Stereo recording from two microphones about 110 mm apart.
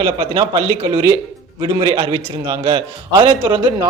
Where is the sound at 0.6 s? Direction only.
60° right (ahead or behind).